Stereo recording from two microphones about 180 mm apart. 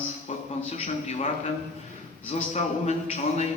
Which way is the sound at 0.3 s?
35° left (ahead or behind).